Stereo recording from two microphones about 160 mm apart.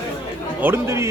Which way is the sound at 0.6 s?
15° right (ahead or behind).